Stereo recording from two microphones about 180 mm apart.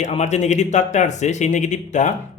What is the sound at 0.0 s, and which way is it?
Speech, 40° left (ahead or behind).